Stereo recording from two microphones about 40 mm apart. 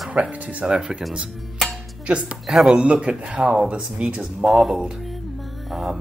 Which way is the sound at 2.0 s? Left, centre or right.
Right.